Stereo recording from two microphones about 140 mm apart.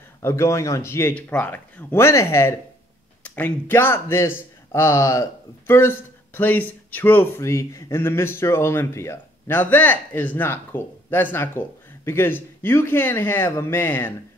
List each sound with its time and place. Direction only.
0.2 s a man's voice: 20° left (ahead or behind)